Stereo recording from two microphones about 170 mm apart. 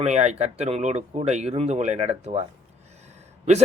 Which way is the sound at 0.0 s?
40° right (ahead or behind).